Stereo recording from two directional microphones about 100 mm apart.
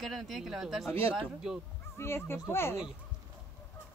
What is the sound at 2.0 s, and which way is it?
Speech, 25° left (ahead or behind).